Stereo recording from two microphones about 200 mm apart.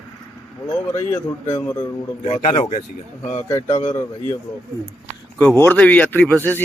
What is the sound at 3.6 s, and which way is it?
Speech, 35° left (ahead or behind).